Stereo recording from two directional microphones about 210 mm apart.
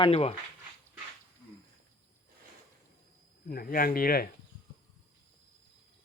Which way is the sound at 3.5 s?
45° left (ahead or behind).